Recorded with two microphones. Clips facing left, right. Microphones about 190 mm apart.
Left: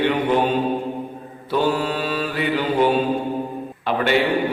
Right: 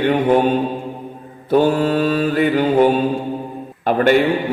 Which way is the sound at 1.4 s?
45° right (ahead or behind).